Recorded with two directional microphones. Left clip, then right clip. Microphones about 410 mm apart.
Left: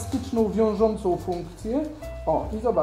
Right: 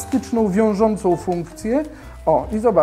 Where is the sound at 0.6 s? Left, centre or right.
Right.